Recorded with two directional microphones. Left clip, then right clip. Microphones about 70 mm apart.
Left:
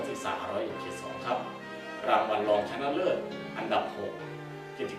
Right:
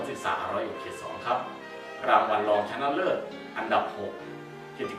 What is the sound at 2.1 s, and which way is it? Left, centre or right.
Speech, centre.